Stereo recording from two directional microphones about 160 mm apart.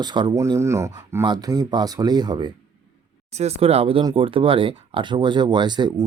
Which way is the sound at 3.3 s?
40° right (ahead or behind).